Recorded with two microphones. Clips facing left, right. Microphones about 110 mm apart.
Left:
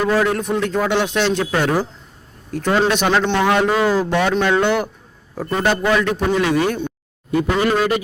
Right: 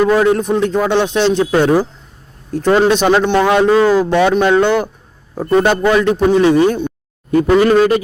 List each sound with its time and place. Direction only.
0.1 s a man's voice: 20° right (ahead or behind)
3.7 s speech: 15° left (ahead or behind)
4.0 s speech: 20° right (ahead or behind)
7.3 s a man's voice: 40° right (ahead or behind)